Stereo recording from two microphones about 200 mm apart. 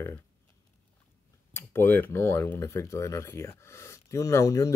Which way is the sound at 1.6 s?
10° left (ahead or behind).